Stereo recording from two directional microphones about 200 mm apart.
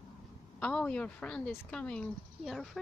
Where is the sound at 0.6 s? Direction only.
5° left (ahead or behind).